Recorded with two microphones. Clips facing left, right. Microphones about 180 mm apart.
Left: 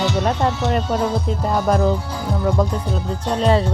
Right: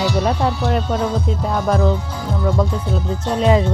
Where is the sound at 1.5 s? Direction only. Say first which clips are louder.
Left 1 dB; 5° left (ahead or behind).